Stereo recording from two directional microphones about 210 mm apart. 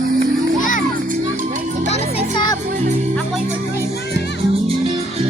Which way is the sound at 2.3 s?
20° left (ahead or behind).